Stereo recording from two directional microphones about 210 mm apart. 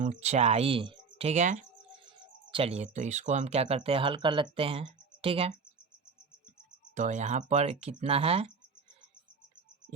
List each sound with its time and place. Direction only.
0.0 s speech: 30° right (ahead or behind)
6.9 s speech: 35° right (ahead or behind)